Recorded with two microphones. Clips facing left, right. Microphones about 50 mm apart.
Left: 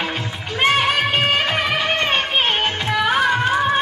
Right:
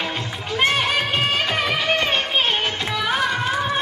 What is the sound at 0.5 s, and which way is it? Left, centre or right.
Music, centre.